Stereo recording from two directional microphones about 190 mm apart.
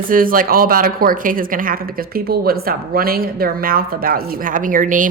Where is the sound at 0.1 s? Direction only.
45° right (ahead or behind).